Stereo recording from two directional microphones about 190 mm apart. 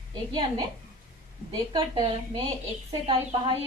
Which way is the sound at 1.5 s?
20° right (ahead or behind).